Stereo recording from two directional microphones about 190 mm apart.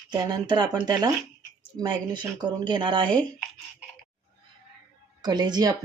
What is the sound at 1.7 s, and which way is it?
A woman's voice, 25° right (ahead or behind).